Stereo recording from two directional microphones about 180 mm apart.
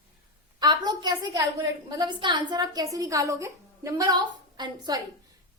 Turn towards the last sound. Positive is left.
turn(degrees=-25)  # may be behind; listen again after turning